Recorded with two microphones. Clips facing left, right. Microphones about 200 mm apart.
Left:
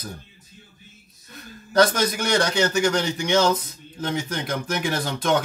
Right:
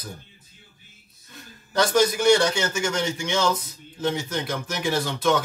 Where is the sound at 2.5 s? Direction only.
35° left (ahead or behind).